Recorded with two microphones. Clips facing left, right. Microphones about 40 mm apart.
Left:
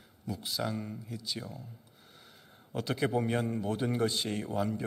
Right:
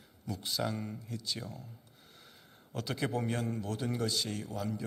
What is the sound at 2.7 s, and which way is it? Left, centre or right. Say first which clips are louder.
Speech: left 4 dB; centre.